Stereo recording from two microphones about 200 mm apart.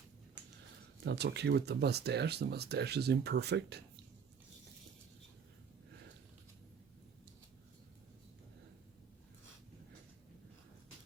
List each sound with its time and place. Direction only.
1.0 s speech: 55° right (ahead or behind)